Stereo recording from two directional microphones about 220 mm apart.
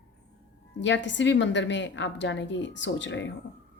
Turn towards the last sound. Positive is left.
turn(degrees=55)  # may be behind; listen again after turning